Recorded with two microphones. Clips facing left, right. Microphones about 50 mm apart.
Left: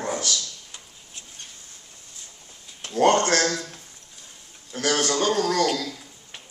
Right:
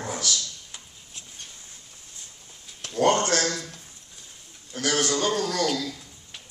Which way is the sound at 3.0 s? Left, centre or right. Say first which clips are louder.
Left 3 dB; left.